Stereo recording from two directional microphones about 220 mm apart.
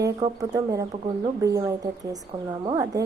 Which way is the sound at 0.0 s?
15° right (ahead or behind).